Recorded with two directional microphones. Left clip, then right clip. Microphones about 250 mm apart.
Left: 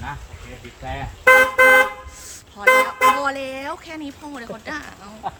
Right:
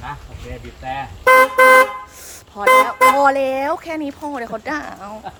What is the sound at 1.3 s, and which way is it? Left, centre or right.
Vehicle, right.